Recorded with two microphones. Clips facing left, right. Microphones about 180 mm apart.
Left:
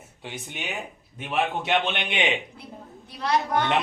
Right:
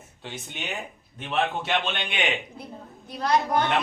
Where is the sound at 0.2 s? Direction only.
10° left (ahead or behind).